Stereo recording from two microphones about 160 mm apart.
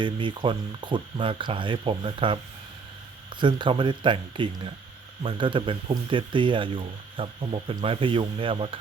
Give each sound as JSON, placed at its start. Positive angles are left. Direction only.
{"t": 0.0, "sound": "speech", "side_deg": -30}
{"t": 3.4, "sound": "speech", "side_deg": -30}